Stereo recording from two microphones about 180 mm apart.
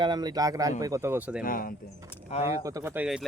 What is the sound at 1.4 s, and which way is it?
Speech, 50° left (ahead or behind).